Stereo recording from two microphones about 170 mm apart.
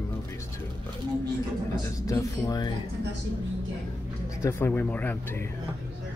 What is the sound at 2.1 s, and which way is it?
Speech, 20° left (ahead or behind).